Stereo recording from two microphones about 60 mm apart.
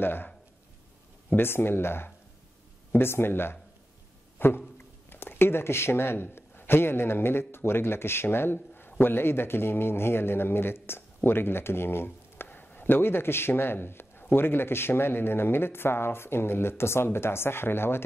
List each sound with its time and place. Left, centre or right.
0.0 s speech: left
1.3 s speech: left
12.4 s speech: left